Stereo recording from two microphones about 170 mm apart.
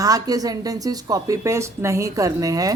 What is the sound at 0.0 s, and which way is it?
Speech, 20° right (ahead or behind).